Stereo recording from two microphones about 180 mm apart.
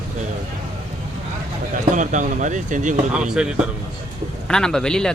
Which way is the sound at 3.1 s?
5° right (ahead or behind).